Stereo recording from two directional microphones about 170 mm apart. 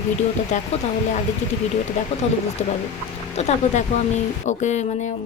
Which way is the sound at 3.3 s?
40° left (ahead or behind).